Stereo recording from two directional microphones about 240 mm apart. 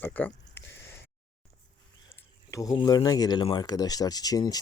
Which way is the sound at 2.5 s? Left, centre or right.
Centre.